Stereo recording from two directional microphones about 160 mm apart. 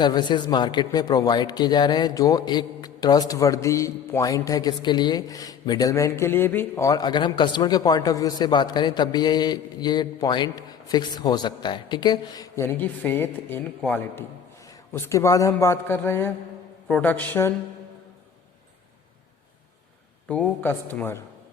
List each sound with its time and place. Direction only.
0.0 s a man's voice: 25° left (ahead or behind)
20.2 s a man's voice: 10° left (ahead or behind)